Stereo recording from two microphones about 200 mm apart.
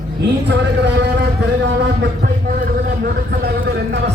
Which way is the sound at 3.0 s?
50° right (ahead or behind).